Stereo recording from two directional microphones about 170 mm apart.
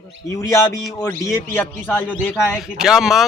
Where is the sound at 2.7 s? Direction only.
5° right (ahead or behind).